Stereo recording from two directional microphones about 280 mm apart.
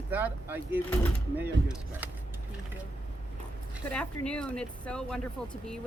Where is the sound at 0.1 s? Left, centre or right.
Centre.